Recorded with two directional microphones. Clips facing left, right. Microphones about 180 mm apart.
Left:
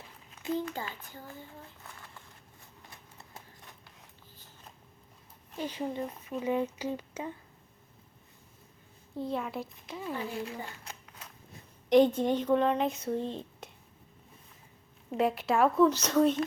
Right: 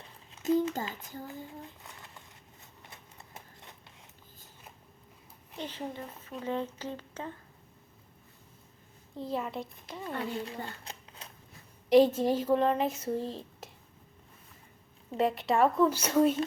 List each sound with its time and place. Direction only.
0.4 s speech: 40° right (ahead or behind)
5.5 s speech: 10° left (ahead or behind)
9.1 s a child's voice: centre (ahead or behind)
10.4 s a sound: 30° right (ahead or behind)
11.9 s speech: 5° right (ahead or behind)
15.1 s speech: centre (ahead or behind)